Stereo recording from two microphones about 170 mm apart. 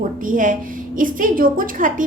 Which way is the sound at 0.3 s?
50° right (ahead or behind).